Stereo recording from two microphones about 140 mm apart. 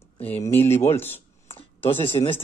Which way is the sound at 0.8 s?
15° left (ahead or behind).